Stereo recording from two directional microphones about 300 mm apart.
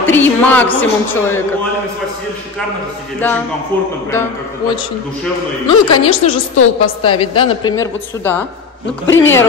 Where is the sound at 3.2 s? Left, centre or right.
Centre.